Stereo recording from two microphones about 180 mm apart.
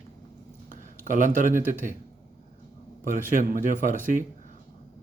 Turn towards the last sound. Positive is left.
turn(degrees=-45)  # may be behind; listen again after turning